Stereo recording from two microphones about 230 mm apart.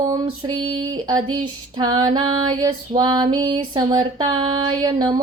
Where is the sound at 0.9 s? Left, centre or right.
Centre.